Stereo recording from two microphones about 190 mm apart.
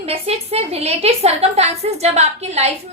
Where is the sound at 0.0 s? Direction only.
30° right (ahead or behind).